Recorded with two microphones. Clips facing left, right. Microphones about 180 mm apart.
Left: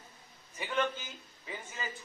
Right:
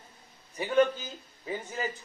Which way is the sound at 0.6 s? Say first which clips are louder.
Right 9 dB; 40° right (ahead or behind).